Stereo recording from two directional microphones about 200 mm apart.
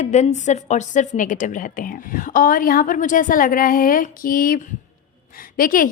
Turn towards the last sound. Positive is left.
turn(degrees=45)  # may be behind; listen again after turning